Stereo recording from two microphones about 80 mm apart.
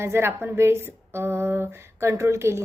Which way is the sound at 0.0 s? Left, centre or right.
Right.